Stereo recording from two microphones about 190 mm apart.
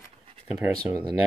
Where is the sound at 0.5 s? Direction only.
10° right (ahead or behind).